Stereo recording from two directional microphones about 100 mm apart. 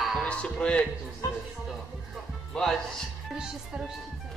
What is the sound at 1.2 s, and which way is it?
Speech, 35° left (ahead or behind).